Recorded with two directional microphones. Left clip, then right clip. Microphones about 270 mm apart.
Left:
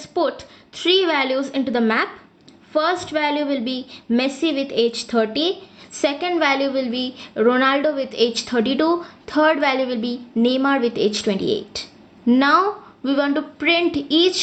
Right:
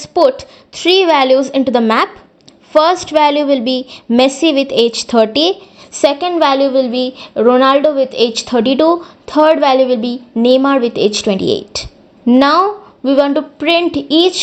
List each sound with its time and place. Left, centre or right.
0.0 s a woman's voice: right